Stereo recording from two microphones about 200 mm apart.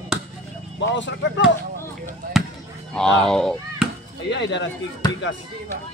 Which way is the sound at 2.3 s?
Centre (ahead or behind).